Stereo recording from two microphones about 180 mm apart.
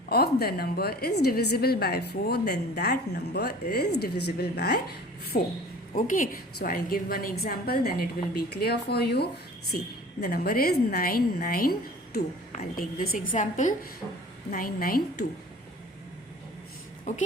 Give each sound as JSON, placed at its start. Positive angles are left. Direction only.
{"t": 0.1, "sound": "a woman's voice", "side_deg": 60}
{"t": 5.9, "sound": "a woman's voice", "side_deg": 50}
{"t": 17.1, "sound": "a woman's voice", "side_deg": 40}